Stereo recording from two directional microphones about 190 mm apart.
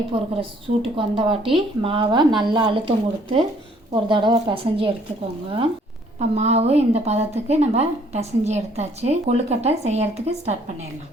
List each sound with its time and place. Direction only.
0.1 s a woman's voice: 30° right (ahead or behind)
3.9 s a woman's voice: 25° right (ahead or behind)
6.1 s a woman's voice: 35° right (ahead or behind)